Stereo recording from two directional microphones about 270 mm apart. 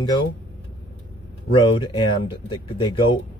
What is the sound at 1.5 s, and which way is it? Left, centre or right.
Speech, centre.